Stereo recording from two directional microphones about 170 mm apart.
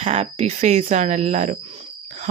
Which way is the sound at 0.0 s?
35° right (ahead or behind).